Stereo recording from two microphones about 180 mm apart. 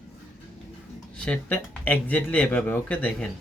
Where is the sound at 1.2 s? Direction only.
5° left (ahead or behind).